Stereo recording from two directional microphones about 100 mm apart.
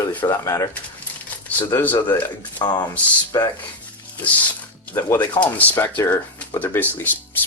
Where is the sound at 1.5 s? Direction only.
15° left (ahead or behind).